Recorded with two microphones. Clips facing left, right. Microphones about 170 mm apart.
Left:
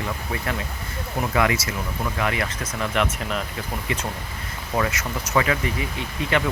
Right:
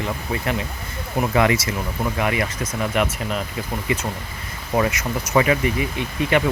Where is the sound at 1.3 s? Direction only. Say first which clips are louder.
Right 3 dB; 25° right (ahead or behind).